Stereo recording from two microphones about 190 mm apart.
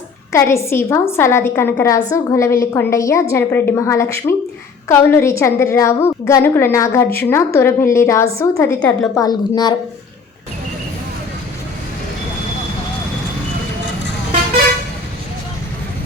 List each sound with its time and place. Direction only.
0.3 s a woman's voice: 15° left (ahead or behind)
9.2 s a woman's voice: 20° left (ahead or behind)